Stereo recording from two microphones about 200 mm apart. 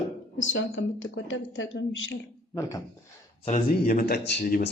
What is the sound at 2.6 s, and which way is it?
Speech, 15° left (ahead or behind).